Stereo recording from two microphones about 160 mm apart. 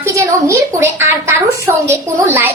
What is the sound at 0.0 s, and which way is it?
Speech, 15° right (ahead or behind).